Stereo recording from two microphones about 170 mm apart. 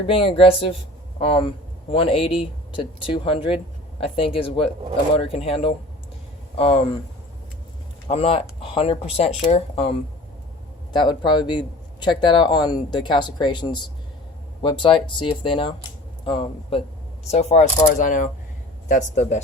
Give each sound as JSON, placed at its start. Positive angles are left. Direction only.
{"t": 0.1, "sound": "speech", "side_deg": 35}
{"t": 8.0, "sound": "a man's voice", "side_deg": 35}